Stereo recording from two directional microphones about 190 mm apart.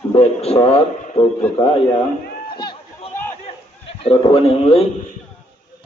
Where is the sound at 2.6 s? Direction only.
25° left (ahead or behind).